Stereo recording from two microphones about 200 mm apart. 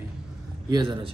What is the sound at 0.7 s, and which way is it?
Speech, 20° right (ahead or behind).